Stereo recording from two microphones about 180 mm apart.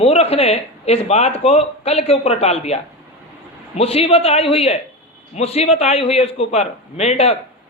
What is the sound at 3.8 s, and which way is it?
Speech, 35° left (ahead or behind).